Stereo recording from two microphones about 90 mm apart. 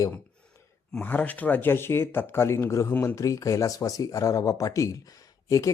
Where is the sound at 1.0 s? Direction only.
20° left (ahead or behind).